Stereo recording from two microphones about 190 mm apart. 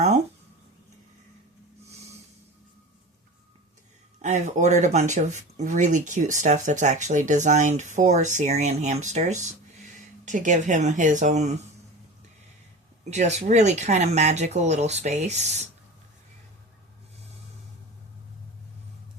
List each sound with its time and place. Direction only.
4.2 s speech: 40° right (ahead or behind)
13.1 s speech: 35° right (ahead or behind)